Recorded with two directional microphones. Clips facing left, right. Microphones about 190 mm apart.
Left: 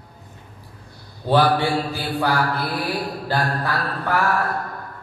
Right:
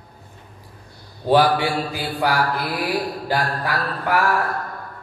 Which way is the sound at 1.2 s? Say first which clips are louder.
Right 1 dB; 15° right (ahead or behind).